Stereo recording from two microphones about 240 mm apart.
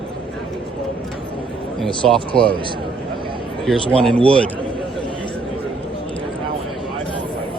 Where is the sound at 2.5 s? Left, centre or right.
Right.